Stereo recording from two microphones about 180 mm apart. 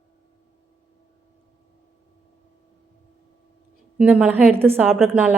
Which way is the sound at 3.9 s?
10° right (ahead or behind).